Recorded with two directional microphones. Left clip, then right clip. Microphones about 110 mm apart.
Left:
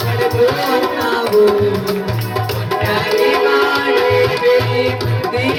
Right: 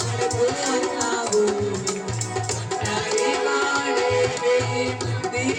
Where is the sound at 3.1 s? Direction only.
20° left (ahead or behind).